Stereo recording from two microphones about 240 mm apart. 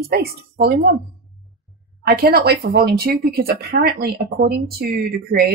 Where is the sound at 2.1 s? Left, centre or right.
Right.